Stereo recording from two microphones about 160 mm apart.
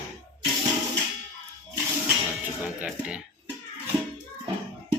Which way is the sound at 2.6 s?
5° right (ahead or behind).